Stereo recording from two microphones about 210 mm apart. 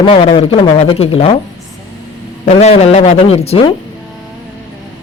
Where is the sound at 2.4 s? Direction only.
30° left (ahead or behind).